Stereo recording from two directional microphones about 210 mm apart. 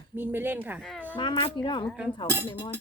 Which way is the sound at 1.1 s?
20° left (ahead or behind).